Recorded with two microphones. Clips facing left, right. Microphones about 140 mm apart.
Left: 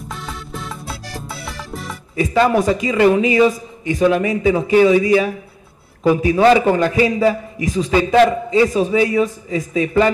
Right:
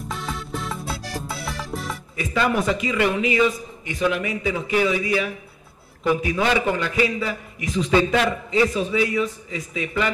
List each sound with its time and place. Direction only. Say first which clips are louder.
0.1 s music: right 1 dB; centre (ahead or behind)
2.1 s a man's voice: left 7 dB; 35° left (ahead or behind)